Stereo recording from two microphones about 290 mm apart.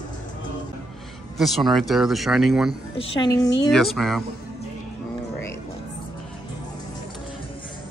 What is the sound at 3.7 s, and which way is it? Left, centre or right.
Speech, centre.